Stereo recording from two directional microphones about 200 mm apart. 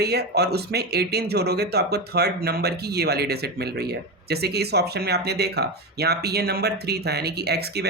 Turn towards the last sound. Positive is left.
turn(degrees=-55)  # may be behind; listen again after turning